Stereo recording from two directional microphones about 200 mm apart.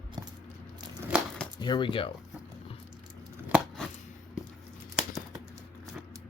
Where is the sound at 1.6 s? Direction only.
20° left (ahead or behind).